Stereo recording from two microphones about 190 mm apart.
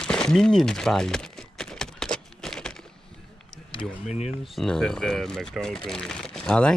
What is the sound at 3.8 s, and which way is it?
Speech, 35° left (ahead or behind).